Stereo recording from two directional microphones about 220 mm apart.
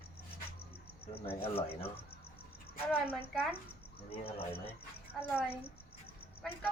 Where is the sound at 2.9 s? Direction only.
10° left (ahead or behind).